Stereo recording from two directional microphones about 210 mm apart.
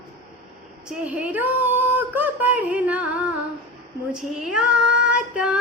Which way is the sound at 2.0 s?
10° right (ahead or behind).